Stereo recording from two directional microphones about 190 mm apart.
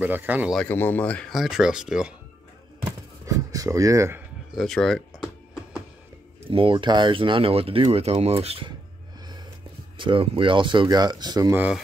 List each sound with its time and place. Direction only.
0.0 s a man's voice: 10° right (ahead or behind)
0.6 s speech: 10° left (ahead or behind)
2.8 s a sound: 20° right (ahead or behind)
4.6 s a sound: centre (ahead or behind)
6.5 s speech: 25° right (ahead or behind)
9.9 s speech: 25° right (ahead or behind)